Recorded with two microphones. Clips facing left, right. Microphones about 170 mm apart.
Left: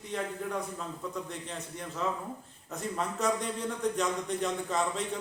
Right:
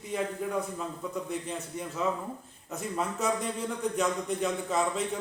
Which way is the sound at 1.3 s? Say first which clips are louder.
Right 5 dB; 5° right (ahead or behind).